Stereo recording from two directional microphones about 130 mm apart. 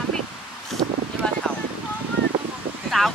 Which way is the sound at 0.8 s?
40° right (ahead or behind).